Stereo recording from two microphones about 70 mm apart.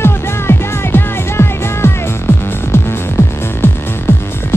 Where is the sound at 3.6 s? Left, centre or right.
Left.